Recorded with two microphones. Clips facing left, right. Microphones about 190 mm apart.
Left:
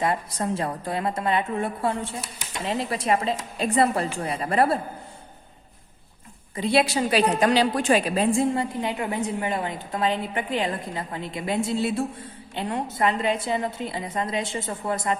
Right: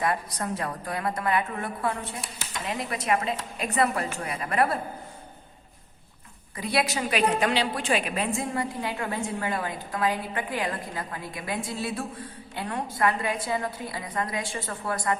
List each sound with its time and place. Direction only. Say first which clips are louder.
0.0 s a woman's voice: left 3 dB; 25° left (ahead or behind)
6.6 s a woman's voice: left 5 dB; 25° left (ahead or behind)